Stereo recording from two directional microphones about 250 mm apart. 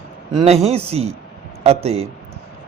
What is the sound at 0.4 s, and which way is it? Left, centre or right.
A man's voice, right.